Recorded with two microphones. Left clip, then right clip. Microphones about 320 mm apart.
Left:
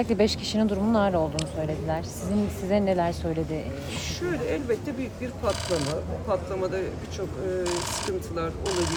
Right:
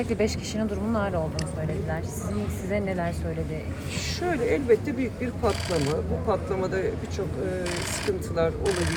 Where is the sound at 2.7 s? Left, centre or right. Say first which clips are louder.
Left 5 dB; left.